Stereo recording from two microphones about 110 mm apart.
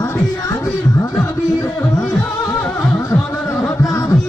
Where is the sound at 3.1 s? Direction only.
25° left (ahead or behind).